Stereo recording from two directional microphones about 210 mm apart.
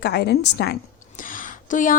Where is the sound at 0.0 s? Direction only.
50° left (ahead or behind).